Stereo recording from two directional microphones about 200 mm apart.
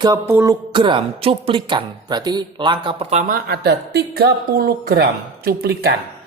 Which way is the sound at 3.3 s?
55° right (ahead or behind).